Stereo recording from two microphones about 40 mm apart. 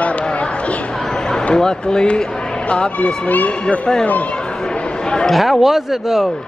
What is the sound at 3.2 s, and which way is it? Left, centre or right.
Speech, left.